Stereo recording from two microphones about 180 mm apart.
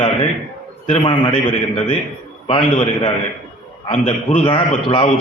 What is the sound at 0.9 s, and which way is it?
A man's voice, 30° left (ahead or behind).